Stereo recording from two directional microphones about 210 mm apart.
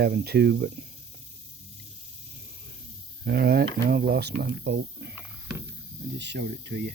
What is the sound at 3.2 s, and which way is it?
Speech, 50° right (ahead or behind).